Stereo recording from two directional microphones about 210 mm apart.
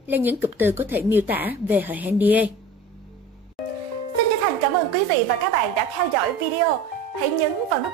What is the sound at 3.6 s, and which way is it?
Music, centre (ahead or behind).